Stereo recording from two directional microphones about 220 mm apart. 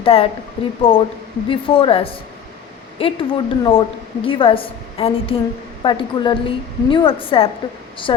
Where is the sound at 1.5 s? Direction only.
25° left (ahead or behind).